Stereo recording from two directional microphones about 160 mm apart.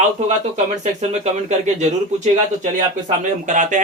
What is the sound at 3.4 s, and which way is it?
Speech, 50° right (ahead or behind).